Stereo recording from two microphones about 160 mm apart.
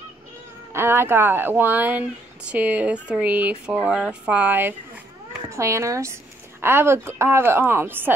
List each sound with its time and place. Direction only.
0.7 s speech: 15° right (ahead or behind)